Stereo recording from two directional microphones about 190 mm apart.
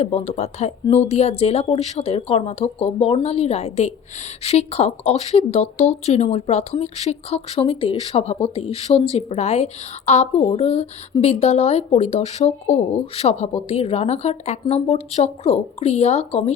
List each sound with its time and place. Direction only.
0.0 s speech: 35° left (ahead or behind)